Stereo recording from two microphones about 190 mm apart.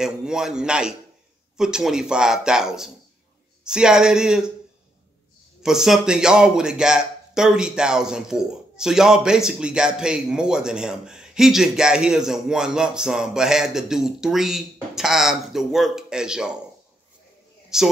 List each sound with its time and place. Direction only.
0.0 s speech: 5° right (ahead or behind)
5.6 s speech: centre (ahead or behind)
17.7 s speech: 5° right (ahead or behind)